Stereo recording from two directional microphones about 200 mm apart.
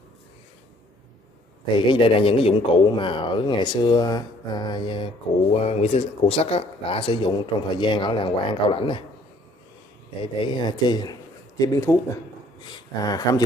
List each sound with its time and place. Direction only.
1.9 s speech: 25° left (ahead or behind)
10.2 s speech: 25° left (ahead or behind)
13.0 s speech: 20° left (ahead or behind)